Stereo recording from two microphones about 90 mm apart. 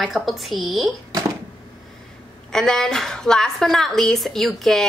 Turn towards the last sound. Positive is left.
turn(degrees=0)  # may be behind; listen again after turning